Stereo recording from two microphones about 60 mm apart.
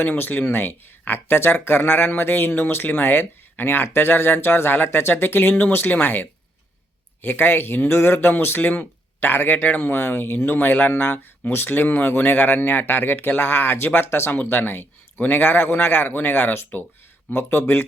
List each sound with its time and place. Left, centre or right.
0.0 s speech: left